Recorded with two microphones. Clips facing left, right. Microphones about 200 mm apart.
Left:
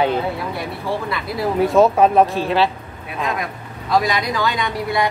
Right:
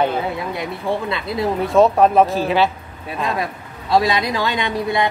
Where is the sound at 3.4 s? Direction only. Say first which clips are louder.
Right 2 dB; 30° right (ahead or behind).